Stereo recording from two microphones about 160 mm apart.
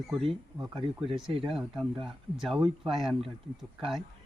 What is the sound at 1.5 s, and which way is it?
Speech, centre (ahead or behind).